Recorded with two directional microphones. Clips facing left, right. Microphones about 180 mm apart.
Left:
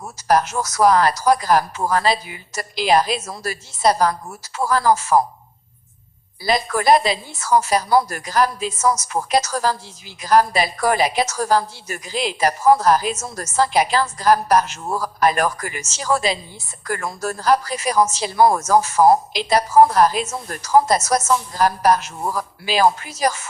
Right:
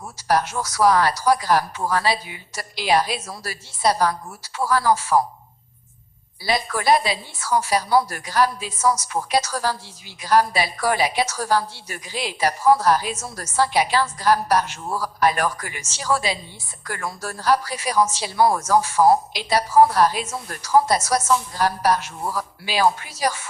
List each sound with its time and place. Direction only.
0.2 s a woman's voice: 45° left (ahead or behind)
6.4 s a woman's voice: 45° left (ahead or behind)